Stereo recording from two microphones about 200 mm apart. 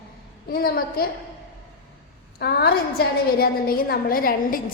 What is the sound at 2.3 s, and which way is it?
A woman's voice, 50° left (ahead or behind).